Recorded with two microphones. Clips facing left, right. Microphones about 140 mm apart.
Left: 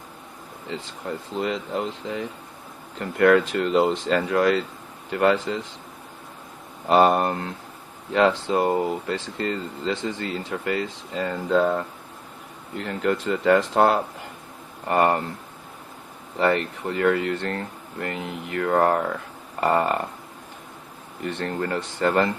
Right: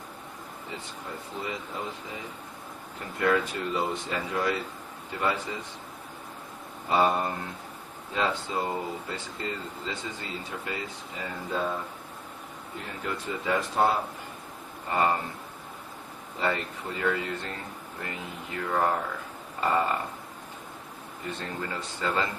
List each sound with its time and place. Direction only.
0.7 s speech: 80° left
6.8 s speech: 75° left (ahead or behind); by 14.0 s 90° left
14.8 s speech: 65° left (ahead or behind)
16.4 s speech: 70° left (ahead or behind)
19.5 s a sound: 70° left (ahead or behind)
21.2 s speech: 70° left (ahead or behind)